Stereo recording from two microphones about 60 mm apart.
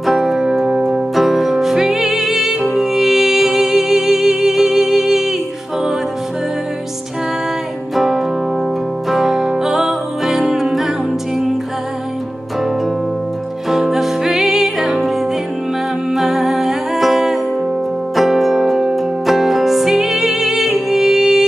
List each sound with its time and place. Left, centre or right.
0.0 s music: centre
7.9 s music: centre
13.7 s music: centre
16.1 s humming: centre
18.1 s music: centre